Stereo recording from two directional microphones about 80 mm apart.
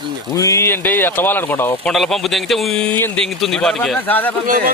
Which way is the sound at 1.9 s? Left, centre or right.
Centre.